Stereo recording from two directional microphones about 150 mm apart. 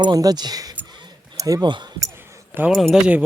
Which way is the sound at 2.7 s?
Centre (ahead or behind).